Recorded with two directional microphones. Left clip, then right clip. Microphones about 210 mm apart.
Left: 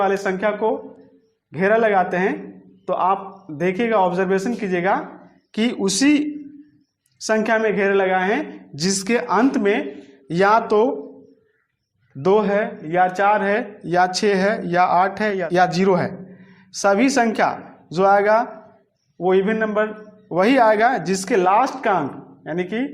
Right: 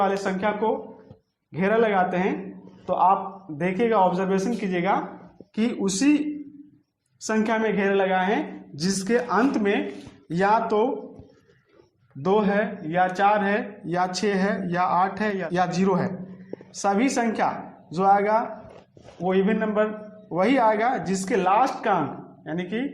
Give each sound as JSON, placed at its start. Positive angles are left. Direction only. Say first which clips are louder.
{"t": 0.0, "sound": "a man's voice", "louder": "left 4 dB", "side_deg": 45}
{"t": 12.2, "sound": "a man's voice", "louder": "left 5 dB", "side_deg": 40}